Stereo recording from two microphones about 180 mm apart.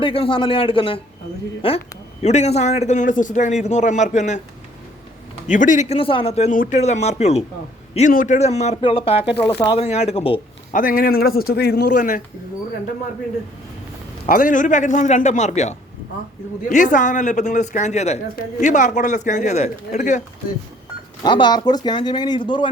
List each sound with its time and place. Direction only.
0.0 s a man's voice: 30° left (ahead or behind)
5.5 s a man's voice: 45° left (ahead or behind)
10.7 s speech: 50° left (ahead or behind)
14.3 s a man's voice: 50° left (ahead or behind)
21.2 s speech: 25° left (ahead or behind)